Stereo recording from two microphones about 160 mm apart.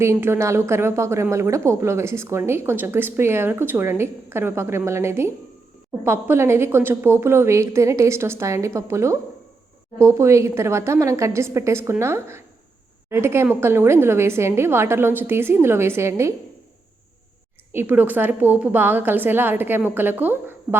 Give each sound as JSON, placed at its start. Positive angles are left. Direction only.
{"t": 0.0, "sound": "a woman's voice", "side_deg": -15}
{"t": 17.7, "sound": "a woman's voice", "side_deg": -10}